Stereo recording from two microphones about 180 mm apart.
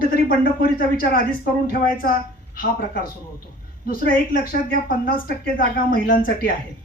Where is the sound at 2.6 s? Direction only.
50° left (ahead or behind).